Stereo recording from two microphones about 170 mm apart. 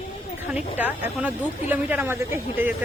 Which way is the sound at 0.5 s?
10° right (ahead or behind).